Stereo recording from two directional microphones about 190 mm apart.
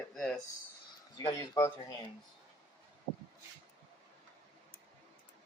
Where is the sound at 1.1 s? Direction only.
20° left (ahead or behind).